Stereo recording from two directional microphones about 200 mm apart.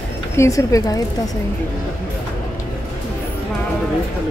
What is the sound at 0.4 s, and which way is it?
Speech, 15° left (ahead or behind).